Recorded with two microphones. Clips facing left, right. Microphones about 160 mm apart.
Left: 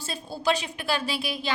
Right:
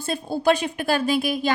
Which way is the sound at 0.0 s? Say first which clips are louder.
Right 7 dB; 55° right (ahead or behind).